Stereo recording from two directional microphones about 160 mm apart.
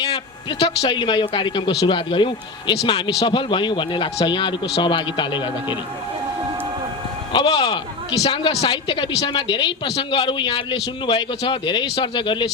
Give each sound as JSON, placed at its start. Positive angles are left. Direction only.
{"t": 0.6, "sound": "a man's voice", "side_deg": 35}
{"t": 7.3, "sound": "a man's voice", "side_deg": 35}